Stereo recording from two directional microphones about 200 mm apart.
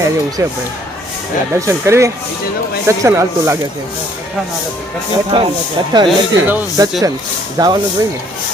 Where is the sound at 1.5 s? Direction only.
15° right (ahead or behind).